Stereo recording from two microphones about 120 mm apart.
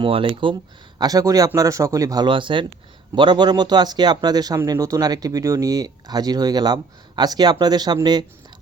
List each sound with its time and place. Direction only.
0.0 s speech: 45° right (ahead or behind); by 2.2 s 30° right (ahead or behind)
2.2 s speech: 45° right (ahead or behind)